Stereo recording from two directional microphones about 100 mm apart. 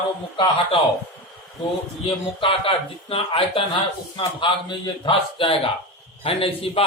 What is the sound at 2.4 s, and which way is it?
Speech, 65° left (ahead or behind).